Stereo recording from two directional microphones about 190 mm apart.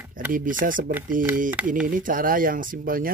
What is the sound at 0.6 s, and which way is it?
Speech, 50° right (ahead or behind).